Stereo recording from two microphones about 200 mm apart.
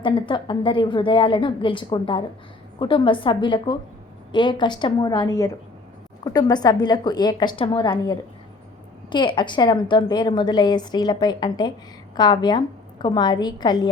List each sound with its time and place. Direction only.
0.0 s a woman's voice: 25° left (ahead or behind)